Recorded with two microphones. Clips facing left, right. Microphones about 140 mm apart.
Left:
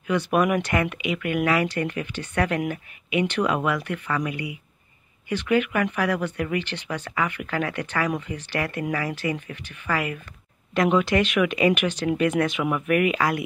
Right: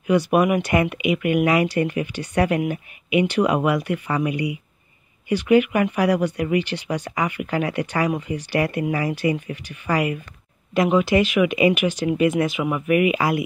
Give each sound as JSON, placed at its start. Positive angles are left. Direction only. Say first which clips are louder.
{"t": 0.0, "sound": "speech", "louder": "right 4 dB", "side_deg": -10}